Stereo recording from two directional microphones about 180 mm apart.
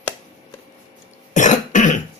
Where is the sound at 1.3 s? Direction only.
45° left (ahead or behind).